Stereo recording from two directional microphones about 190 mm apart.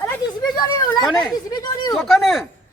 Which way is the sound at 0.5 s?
20° left (ahead or behind).